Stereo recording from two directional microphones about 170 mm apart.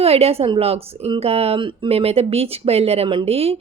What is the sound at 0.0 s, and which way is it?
A woman's voice, 35° right (ahead or behind).